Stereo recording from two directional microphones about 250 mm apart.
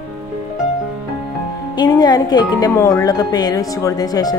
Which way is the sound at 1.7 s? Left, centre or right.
Centre.